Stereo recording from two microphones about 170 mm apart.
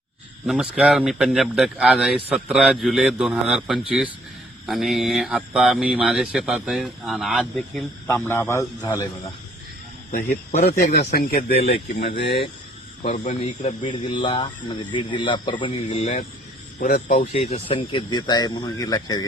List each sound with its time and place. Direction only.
0.4 s speech: 5° right (ahead or behind)
8.0 s a man's voice: 15° left (ahead or behind)
10.1 s speech: 45° left (ahead or behind)
11.1 s speech: 60° left (ahead or behind)
11.9 s speech: 75° left (ahead or behind)
13.4 s speech: 35° left (ahead or behind)
16.8 s speech: 55° left (ahead or behind)
17.3 s speech: 35° left (ahead or behind)